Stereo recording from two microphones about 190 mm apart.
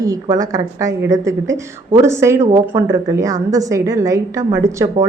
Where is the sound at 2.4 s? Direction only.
35° right (ahead or behind).